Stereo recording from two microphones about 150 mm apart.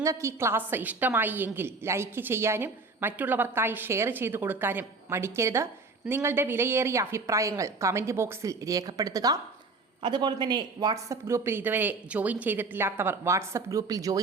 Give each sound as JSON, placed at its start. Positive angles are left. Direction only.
{"t": 0.0, "sound": "a woman's voice", "side_deg": -20}